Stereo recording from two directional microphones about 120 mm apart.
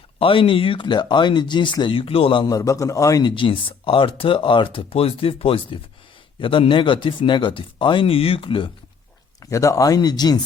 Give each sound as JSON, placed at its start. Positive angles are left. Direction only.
{"t": 0.2, "sound": "speech", "side_deg": 45}
{"t": 2.5, "sound": "a man's voice", "side_deg": 30}
{"t": 3.3, "sound": "speech", "side_deg": 45}
{"t": 9.4, "sound": "speech", "side_deg": 25}